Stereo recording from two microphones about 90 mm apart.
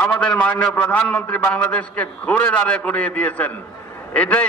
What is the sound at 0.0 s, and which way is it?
A man's voice, 15° left (ahead or behind).